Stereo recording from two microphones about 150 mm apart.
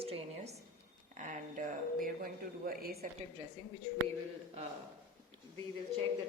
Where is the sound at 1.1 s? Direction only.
55° right (ahead or behind); by 2.9 s 80° right.